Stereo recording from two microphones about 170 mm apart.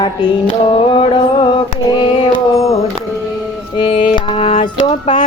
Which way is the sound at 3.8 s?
30° left (ahead or behind).